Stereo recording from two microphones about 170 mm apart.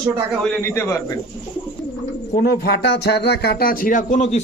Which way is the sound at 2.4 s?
65° left (ahead or behind).